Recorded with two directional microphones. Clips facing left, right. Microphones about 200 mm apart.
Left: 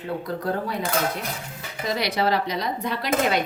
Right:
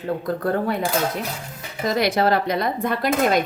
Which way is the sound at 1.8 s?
45° right (ahead or behind).